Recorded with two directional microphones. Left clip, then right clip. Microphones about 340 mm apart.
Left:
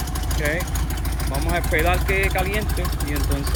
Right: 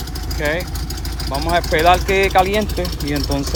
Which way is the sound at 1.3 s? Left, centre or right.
Centre.